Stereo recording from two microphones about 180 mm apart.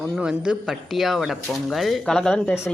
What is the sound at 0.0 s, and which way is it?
Speech, 5° right (ahead or behind).